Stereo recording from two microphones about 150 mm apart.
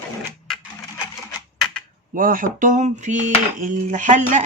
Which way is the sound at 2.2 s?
65° right (ahead or behind).